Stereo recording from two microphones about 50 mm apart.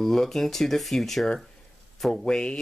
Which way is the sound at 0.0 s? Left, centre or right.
Centre.